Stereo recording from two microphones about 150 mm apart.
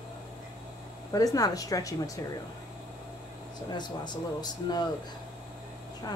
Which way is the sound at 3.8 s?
30° left (ahead or behind).